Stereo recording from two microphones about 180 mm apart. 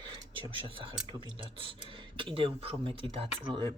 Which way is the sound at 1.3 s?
30° right (ahead or behind).